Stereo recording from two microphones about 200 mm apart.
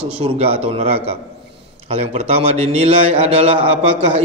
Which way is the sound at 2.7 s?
30° right (ahead or behind).